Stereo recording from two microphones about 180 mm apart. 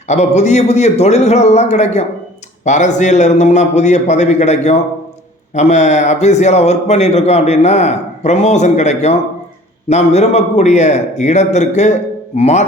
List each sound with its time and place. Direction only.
0.1 s a man's voice: 40° left (ahead or behind)